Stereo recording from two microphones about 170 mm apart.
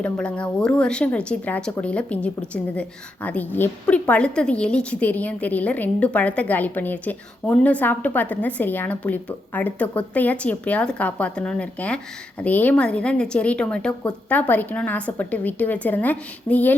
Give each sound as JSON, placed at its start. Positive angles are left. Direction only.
{"t": 0.0, "sound": "a woman's voice", "side_deg": 5}